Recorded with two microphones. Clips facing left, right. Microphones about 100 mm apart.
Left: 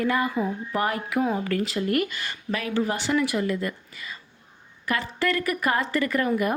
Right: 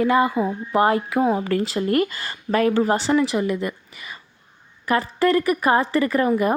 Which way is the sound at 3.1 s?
25° right (ahead or behind).